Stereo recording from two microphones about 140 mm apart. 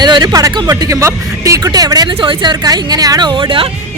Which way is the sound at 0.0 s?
30° right (ahead or behind).